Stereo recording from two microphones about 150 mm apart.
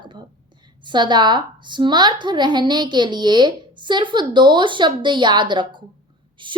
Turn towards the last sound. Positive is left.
turn(degrees=-35)  # may be behind; listen again after turning